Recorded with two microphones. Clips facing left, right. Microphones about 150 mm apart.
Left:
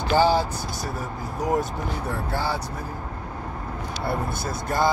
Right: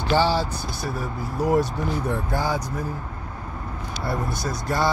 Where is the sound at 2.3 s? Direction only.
15° right (ahead or behind).